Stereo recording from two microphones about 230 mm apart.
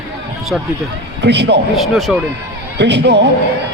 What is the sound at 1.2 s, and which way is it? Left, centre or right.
Speech, right.